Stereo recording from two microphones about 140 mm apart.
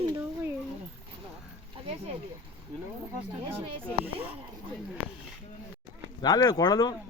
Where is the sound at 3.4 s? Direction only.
40° right (ahead or behind).